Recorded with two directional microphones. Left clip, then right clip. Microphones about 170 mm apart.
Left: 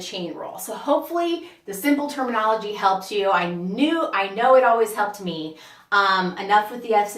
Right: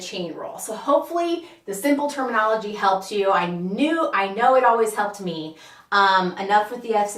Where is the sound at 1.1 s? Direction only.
20° left (ahead or behind).